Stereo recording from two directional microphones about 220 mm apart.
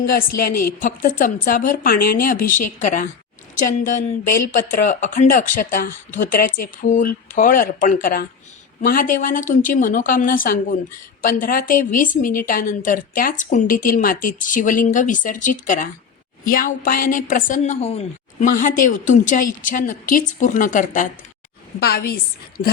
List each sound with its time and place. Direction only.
0.0 s a woman's voice: 40° left (ahead or behind)